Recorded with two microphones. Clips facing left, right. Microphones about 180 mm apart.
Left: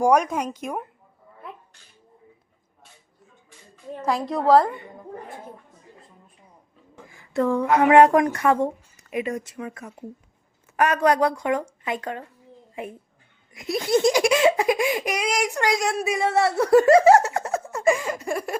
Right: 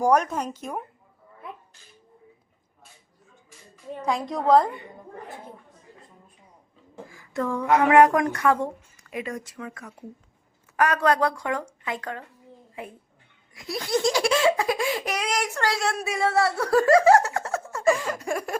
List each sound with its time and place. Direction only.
0.0 s laughter: 10° left (ahead or behind)
4.0 s a woman's voice: 5° left (ahead or behind)
7.1 s speech: 25° left (ahead or behind)
13.5 s laughter: 20° left (ahead or behind); by 18.5 s 5° left (ahead or behind)